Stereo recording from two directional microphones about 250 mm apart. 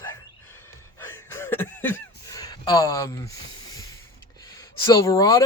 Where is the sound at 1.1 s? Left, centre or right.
Centre.